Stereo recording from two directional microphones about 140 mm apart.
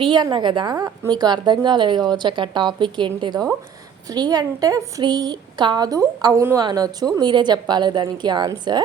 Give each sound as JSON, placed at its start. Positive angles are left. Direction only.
{"t": 0.0, "sound": "a woman's voice", "side_deg": -30}